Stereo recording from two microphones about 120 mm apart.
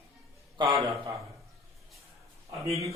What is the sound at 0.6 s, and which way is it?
Mantra, 25° right (ahead or behind).